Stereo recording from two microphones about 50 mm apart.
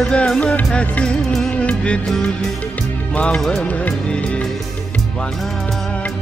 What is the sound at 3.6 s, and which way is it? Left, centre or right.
Music, left.